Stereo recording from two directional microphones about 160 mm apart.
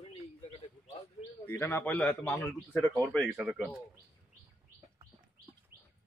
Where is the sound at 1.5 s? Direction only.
15° left (ahead or behind).